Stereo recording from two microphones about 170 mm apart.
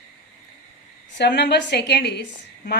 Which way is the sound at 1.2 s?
85° left.